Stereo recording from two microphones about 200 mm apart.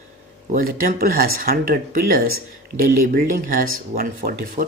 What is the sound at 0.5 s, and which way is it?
Speech, 45° right (ahead or behind).